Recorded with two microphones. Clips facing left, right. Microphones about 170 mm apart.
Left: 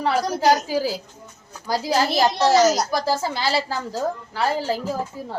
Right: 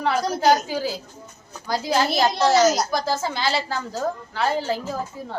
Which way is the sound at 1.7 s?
35° left (ahead or behind).